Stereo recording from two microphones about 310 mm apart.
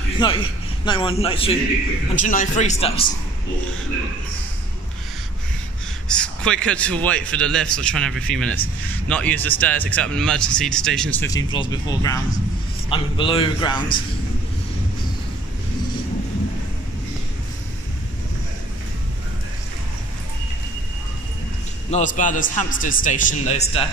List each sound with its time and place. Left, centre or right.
0.2 s a man's voice: centre
6.0 s a man's voice: centre
21.9 s a man's voice: left